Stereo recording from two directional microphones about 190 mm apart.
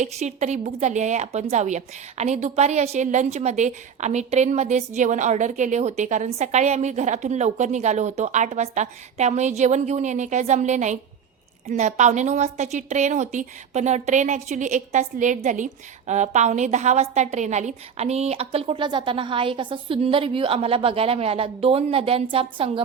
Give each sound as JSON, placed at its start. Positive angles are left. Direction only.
{"t": 0.0, "sound": "a woman's voice", "side_deg": -40}